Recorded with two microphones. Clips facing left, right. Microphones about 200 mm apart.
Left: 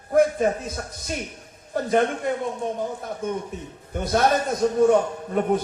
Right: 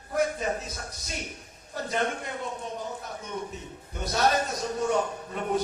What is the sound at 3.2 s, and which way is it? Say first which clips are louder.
A man's voice: left 9 dB; 50° left (ahead or behind).